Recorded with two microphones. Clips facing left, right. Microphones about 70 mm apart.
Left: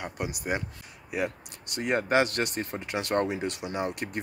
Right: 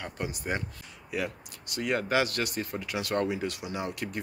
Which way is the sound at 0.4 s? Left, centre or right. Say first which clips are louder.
Left 2 dB; centre.